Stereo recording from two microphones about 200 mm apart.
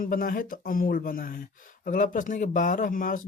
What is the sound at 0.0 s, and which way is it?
Speech, 45° left (ahead or behind).